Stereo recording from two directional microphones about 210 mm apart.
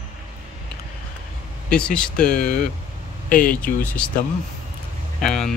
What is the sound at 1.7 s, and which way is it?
Speech, 5° left (ahead or behind).